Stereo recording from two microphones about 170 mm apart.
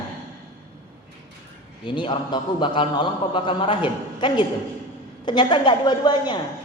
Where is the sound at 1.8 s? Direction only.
30° left (ahead or behind).